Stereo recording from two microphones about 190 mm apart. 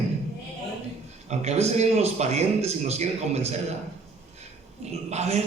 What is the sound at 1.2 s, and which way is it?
A man's voice, 35° right (ahead or behind).